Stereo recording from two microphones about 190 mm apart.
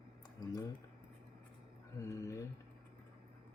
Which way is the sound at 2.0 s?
15° left (ahead or behind).